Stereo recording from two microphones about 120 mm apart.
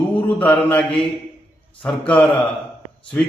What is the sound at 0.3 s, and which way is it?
Speech, 10° left (ahead or behind).